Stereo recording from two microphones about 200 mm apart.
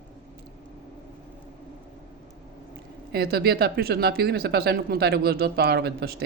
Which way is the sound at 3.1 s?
50° right (ahead or behind).